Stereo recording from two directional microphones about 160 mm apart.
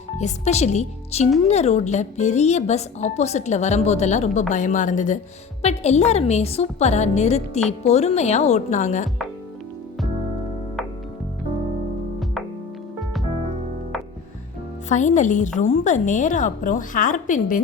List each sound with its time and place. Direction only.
0.2 s a woman's voice: 45° left (ahead or behind)
14.8 s a woman's voice: 50° left (ahead or behind)